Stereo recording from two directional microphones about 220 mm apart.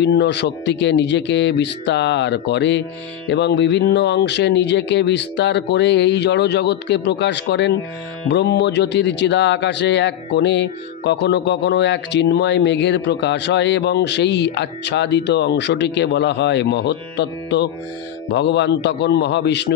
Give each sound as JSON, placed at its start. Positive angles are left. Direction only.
{"t": 0.0, "sound": "speech", "side_deg": 50}